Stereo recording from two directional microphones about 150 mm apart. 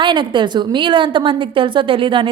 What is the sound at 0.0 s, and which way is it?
Speech, 30° right (ahead or behind).